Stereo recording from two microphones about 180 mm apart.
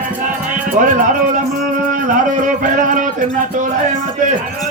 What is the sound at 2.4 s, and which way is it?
Music, 45° right (ahead or behind).